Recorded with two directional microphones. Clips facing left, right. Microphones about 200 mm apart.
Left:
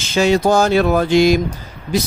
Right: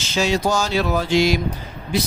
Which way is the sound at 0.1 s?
55° left (ahead or behind).